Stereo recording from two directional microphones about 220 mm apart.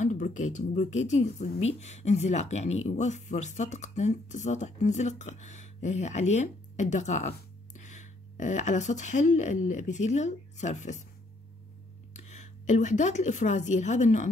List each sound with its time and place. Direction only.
0.0 s speech: 35° left (ahead or behind)
12.1 s speech: 30° left (ahead or behind)